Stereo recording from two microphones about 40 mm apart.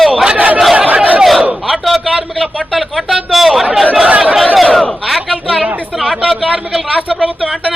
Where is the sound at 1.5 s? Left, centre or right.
Centre.